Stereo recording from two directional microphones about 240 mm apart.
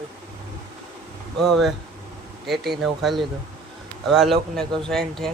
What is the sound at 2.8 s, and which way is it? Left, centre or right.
Speech, centre.